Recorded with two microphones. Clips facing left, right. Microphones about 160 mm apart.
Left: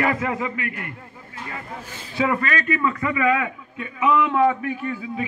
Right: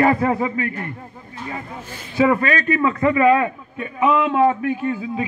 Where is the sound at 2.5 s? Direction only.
40° right (ahead or behind).